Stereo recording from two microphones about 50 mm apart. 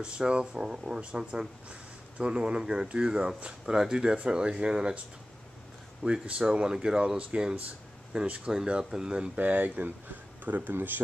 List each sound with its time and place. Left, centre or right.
0.0 s speech: centre
6.2 s speech: right
9.4 s speech: right